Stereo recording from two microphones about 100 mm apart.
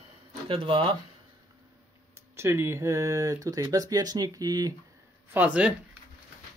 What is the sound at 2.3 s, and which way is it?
Speech, 25° right (ahead or behind).